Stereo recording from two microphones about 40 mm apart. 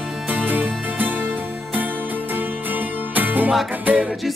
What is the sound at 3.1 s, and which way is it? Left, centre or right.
Music, right.